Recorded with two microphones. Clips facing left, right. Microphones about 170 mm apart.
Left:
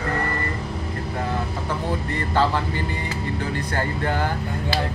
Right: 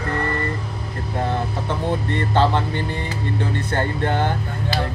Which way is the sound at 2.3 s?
25° right (ahead or behind).